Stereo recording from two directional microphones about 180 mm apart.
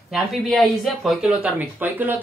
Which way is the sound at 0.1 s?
Centre (ahead or behind).